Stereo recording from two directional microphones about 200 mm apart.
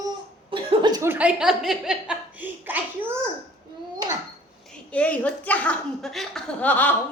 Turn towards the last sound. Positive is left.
turn(degrees=10)  # may be behind; listen again after turning